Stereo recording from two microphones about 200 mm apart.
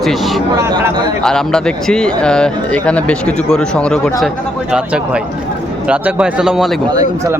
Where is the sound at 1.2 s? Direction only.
5° left (ahead or behind).